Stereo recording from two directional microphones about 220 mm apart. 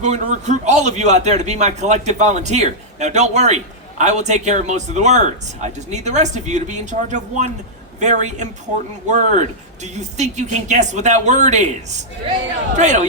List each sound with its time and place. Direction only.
0.0 s a man's voice: 30° right (ahead or behind)